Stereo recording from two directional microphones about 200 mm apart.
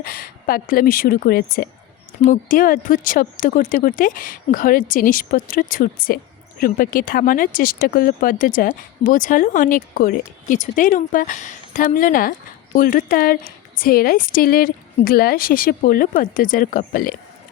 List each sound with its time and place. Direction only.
0.0 s speech: 45° left (ahead or behind)